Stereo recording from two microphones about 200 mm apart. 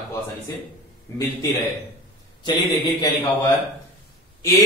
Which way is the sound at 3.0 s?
25° left (ahead or behind).